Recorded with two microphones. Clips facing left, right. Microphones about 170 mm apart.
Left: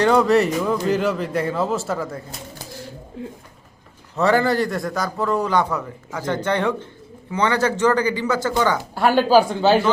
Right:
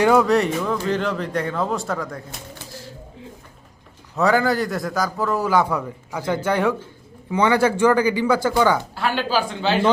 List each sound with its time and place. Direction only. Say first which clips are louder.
0.0 s a man's voice: even; 5° right (ahead or behind)
4.2 s a man's voice: left 1 dB; centre (ahead or behind)
9.0 s speech: left 7 dB; 45° left (ahead or behind)